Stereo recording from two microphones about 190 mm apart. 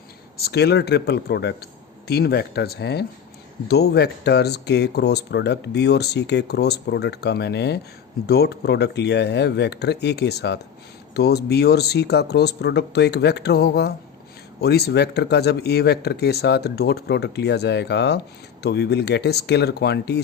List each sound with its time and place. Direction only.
0.3 s speech: 55° left (ahead or behind)